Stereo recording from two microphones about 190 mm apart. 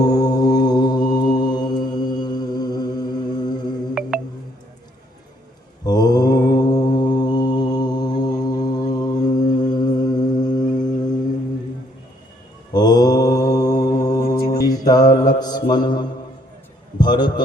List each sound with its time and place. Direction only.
0.0 s mantra: 20° left (ahead or behind)
4.0 s music: 5° right (ahead or behind)
5.8 s mantra: 20° left (ahead or behind)
12.7 s mantra: 20° left (ahead or behind)
17.0 s a sound: 25° left (ahead or behind)